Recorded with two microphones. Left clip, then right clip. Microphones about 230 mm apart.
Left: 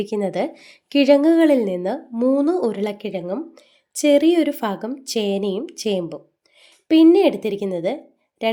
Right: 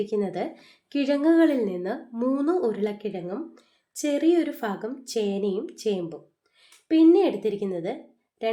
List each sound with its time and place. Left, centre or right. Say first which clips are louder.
0.0 s speech: left 5 dB; left